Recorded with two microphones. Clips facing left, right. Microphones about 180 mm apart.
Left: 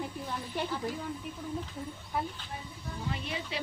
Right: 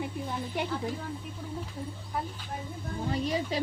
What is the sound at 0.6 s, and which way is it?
Speech, 15° right (ahead or behind).